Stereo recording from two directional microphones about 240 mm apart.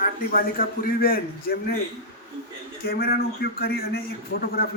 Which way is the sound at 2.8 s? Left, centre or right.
Left.